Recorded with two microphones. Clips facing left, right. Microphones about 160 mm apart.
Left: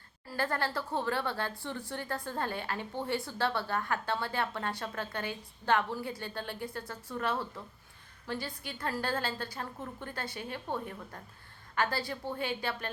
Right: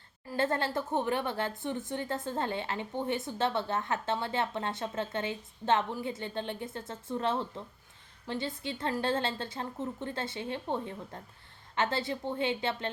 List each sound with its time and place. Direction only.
0.3 s speech: 25° right (ahead or behind)